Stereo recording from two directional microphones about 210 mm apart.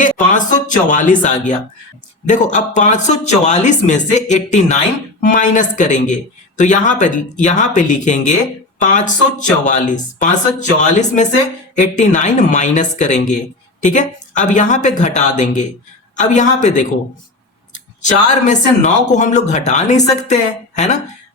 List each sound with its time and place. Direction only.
0.0 s speech: 35° left (ahead or behind)